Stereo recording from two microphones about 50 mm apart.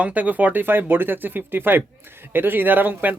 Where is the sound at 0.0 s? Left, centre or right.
Right.